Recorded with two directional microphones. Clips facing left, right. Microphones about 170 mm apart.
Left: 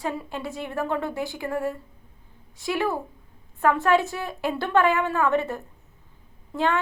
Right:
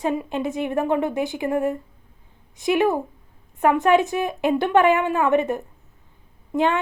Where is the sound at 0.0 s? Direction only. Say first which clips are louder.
Right 7 dB; 20° right (ahead or behind).